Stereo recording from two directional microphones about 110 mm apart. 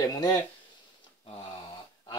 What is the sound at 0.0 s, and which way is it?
Speech, 35° left (ahead or behind).